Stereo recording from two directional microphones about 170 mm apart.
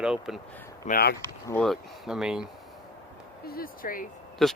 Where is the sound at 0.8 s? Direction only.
65° left (ahead or behind).